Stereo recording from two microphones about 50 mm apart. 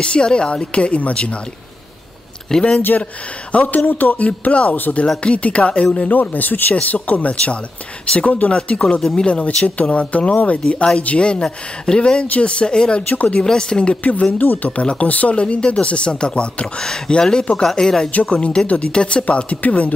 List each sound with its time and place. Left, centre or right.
0.0 s speech: centre
2.5 s speech: centre
3.5 s speech: left
4.7 s speech: left
5.2 s speech: left
11.4 s speech: centre
12.0 s speech: left
13.1 s speech: left
13.4 s speech: centre
14.4 s speech: left